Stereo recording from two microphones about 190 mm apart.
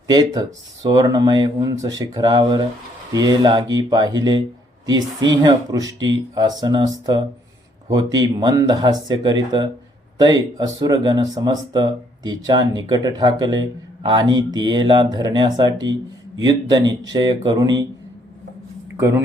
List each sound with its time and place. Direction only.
0.1 s speech: 20° right (ahead or behind)
18.9 s speech: 15° right (ahead or behind)